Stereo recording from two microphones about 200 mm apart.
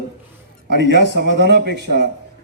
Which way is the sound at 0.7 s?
55° right (ahead or behind).